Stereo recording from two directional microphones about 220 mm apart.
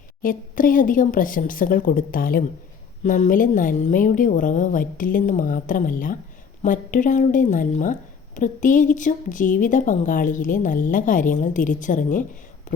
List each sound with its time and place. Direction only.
0.2 s a woman's voice: 40° left (ahead or behind)